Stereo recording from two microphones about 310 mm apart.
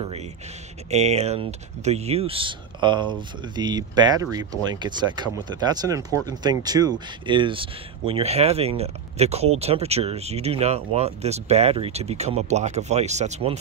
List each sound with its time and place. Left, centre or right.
0.8 s speech: right